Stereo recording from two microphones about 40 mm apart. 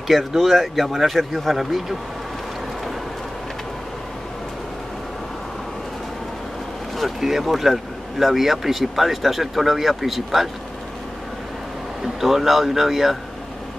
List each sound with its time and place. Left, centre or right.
0.1 s speech: centre
7.0 s speech: centre
12.0 s speech: centre